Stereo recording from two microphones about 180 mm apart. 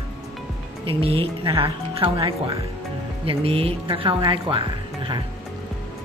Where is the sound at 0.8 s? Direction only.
30° right (ahead or behind).